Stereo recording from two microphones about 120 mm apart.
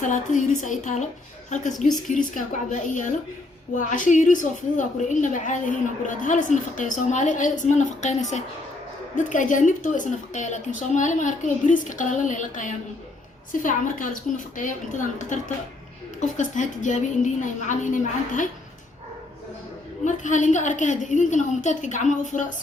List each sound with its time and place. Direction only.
0.0 s a woman's voice: 90° left
20.1 s a woman's voice: 90° left